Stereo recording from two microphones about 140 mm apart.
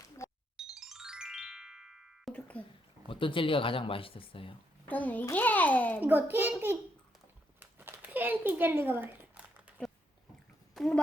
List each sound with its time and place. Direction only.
0.2 s music: 20° left (ahead or behind)
0.7 s music: 5° right (ahead or behind)
2.3 s a child's voice: 10° left (ahead or behind)
3.1 s speech: 40° left (ahead or behind)
4.9 s a child's voice: 10° left (ahead or behind)
6.0 s a child's voice: 15° right (ahead or behind)
7.6 s a sound: 15° right (ahead or behind)
10.8 s a sound: 5° left (ahead or behind)